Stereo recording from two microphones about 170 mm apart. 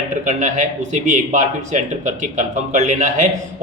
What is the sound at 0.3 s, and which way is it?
Speech, 45° right (ahead or behind).